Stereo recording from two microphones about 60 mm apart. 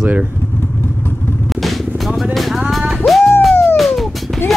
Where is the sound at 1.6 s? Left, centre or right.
Centre.